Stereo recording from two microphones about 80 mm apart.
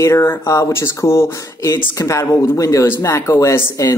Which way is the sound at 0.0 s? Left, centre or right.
Left.